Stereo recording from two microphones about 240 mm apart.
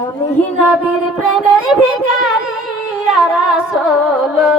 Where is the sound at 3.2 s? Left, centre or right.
Centre.